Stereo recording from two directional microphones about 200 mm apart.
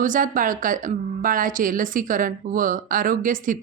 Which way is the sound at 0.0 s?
40° right (ahead or behind).